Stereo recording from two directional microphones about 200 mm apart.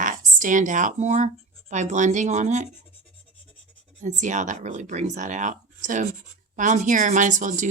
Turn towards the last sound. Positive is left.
turn(degrees=-40)  # may be behind; listen again after turning